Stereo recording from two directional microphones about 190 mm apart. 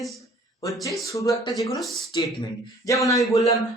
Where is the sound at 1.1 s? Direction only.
15° left (ahead or behind).